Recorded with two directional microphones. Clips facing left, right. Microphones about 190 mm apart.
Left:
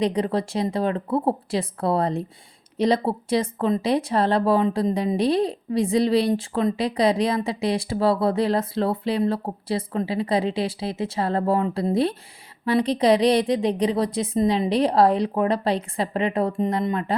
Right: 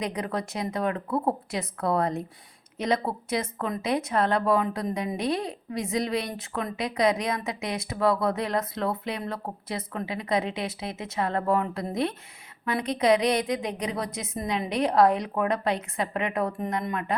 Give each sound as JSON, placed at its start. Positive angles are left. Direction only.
{"t": 0.0, "sound": "speech", "side_deg": 30}